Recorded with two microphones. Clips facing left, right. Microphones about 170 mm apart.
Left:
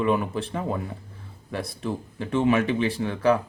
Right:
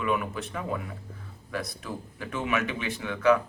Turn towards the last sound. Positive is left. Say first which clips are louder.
# left 1 dB
turn(degrees=35)  # may be behind; listen again after turning